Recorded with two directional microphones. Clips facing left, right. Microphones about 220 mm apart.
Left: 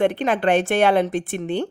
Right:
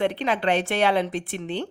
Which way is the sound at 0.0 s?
50° left (ahead or behind).